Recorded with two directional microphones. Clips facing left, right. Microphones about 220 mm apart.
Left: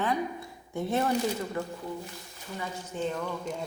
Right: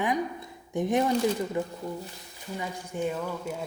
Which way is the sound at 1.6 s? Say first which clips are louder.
Right 3 dB; 15° right (ahead or behind).